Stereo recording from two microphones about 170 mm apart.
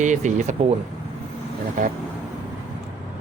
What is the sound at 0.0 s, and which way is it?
Speech, 45° right (ahead or behind).